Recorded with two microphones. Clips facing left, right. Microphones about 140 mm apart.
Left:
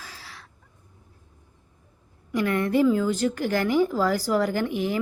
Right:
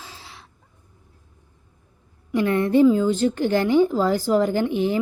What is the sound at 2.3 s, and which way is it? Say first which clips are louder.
Speech: right 4 dB; 25° right (ahead or behind).